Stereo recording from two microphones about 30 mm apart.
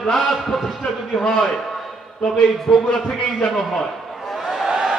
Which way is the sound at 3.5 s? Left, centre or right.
Centre.